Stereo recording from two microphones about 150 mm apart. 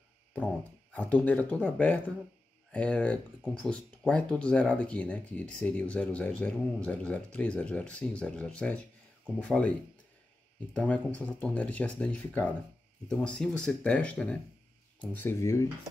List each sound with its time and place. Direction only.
0.3 s speech: 10° left (ahead or behind)